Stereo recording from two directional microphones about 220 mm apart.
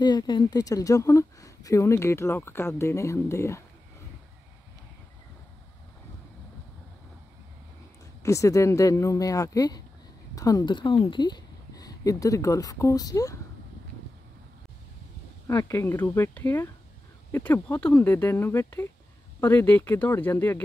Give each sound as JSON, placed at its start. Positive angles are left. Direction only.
{"t": 0.0, "sound": "a woman's voice", "side_deg": 20}
{"t": 8.2, "sound": "a woman's voice", "side_deg": 15}
{"t": 15.4, "sound": "a woman's voice", "side_deg": 10}